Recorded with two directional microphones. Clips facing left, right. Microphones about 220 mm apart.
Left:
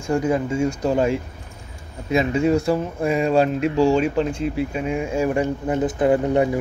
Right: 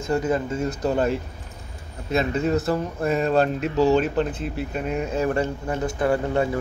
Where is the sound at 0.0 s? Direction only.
10° left (ahead or behind).